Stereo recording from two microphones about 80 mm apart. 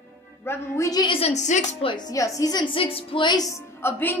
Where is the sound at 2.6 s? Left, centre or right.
Left.